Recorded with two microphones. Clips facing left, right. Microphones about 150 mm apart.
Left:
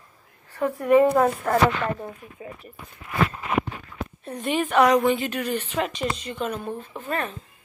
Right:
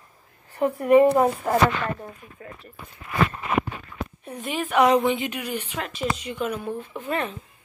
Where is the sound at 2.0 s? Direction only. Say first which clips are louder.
Left 3 dB; 15° left (ahead or behind).